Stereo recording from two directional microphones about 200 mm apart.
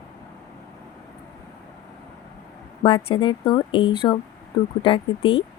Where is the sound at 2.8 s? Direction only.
25° left (ahead or behind).